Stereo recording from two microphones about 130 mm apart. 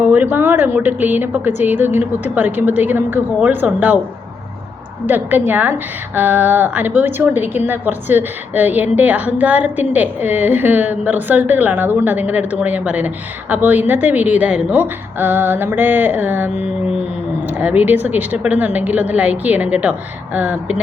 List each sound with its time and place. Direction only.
0.1 s a woman's voice: 15° right (ahead or behind)
5.0 s a woman's voice: 15° right (ahead or behind)